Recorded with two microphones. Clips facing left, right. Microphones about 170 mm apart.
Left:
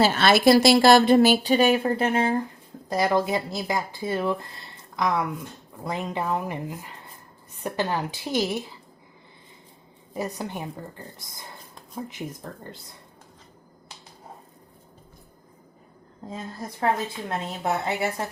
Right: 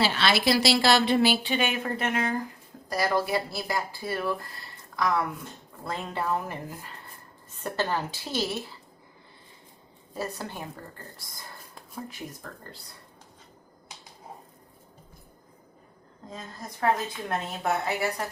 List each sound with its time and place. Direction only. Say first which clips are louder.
0.0 s speech: left 6 dB; 45° left (ahead or behind); by 2.3 s 30° left (ahead or behind)
2.9 s a woman's voice: left 3 dB; 20° left (ahead or behind)
10.2 s a woman's voice: left 4 dB; 20° left (ahead or behind)
17.2 s speech: even; 25° left (ahead or behind)